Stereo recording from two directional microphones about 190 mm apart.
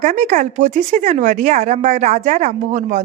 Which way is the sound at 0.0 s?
40° right (ahead or behind).